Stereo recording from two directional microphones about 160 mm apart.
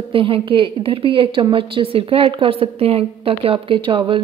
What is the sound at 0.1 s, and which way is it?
Speech, 35° right (ahead or behind).